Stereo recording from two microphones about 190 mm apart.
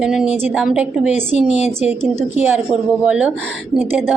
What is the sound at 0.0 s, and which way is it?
A woman's voice, 5° right (ahead or behind).